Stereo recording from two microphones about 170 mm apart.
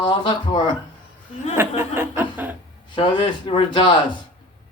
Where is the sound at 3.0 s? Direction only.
30° left (ahead or behind).